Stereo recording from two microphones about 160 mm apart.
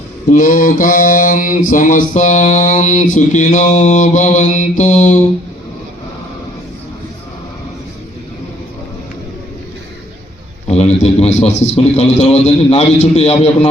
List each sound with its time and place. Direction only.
0.3 s mantra: 60° left (ahead or behind)
10.7 s a man's voice: 40° left (ahead or behind)